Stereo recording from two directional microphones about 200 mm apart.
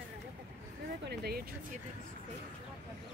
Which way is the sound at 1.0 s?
55° right (ahead or behind).